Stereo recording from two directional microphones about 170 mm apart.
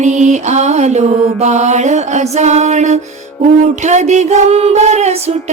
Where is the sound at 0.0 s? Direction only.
45° right (ahead or behind).